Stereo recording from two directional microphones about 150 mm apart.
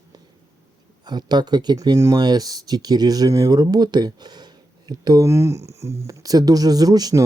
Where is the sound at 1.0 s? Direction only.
30° right (ahead or behind).